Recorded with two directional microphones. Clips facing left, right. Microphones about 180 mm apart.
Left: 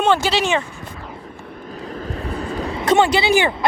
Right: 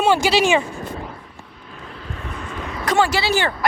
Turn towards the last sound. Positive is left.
turn(degrees=20)  # may be behind; listen again after turning